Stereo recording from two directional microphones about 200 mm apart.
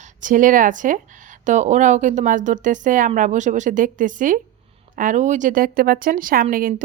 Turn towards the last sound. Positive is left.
turn(degrees=-45)  # may be behind; listen again after turning